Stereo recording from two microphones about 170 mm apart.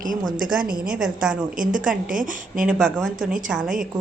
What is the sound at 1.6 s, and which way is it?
A woman's voice, 50° right (ahead or behind).